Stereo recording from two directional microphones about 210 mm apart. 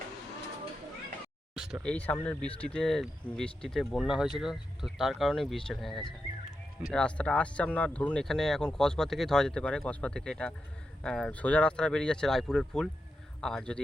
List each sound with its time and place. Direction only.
1.5 s speech: centre (ahead or behind)